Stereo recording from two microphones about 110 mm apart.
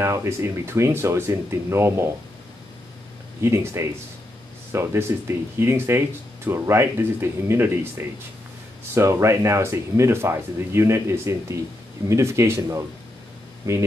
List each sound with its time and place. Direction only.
0.0 s speech: 25° right (ahead or behind)
3.4 s speech: 25° right (ahead or behind)
8.9 s speech: 25° right (ahead or behind)